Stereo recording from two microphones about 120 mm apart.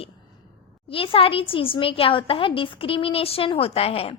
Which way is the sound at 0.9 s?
50° left (ahead or behind).